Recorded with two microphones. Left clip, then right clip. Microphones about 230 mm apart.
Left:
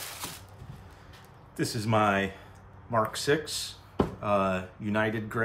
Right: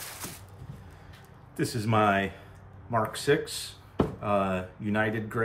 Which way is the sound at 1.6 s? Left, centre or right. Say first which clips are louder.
Right 1 dB; centre.